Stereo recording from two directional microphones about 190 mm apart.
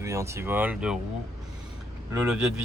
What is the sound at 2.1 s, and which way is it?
Speech, 5° right (ahead or behind).